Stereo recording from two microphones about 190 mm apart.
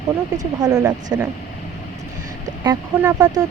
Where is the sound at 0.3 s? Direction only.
20° right (ahead or behind).